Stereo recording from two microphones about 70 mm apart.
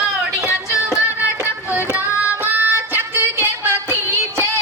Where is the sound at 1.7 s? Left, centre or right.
Right.